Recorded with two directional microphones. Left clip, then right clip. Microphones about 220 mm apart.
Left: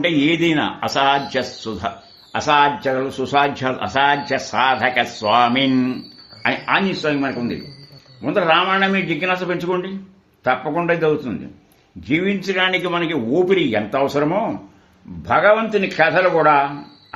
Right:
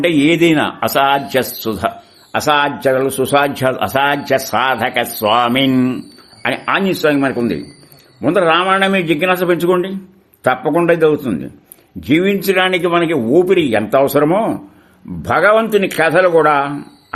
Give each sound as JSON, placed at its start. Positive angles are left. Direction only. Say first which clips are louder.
{"t": 0.0, "sound": "a man's voice", "louder": "right 5 dB", "side_deg": -55}